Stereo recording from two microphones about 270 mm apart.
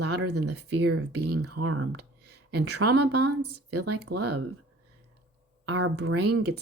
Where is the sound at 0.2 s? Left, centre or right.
Right.